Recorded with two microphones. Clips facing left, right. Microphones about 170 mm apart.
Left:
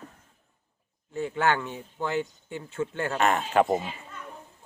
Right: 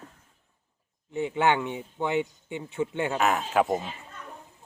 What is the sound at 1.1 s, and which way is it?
Speech, 20° right (ahead or behind).